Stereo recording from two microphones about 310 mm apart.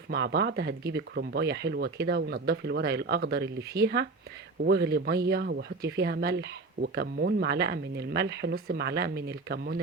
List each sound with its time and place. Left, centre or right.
0.1 s speech: right